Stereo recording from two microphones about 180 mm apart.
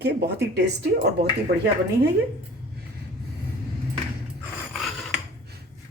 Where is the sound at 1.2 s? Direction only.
65° right (ahead or behind).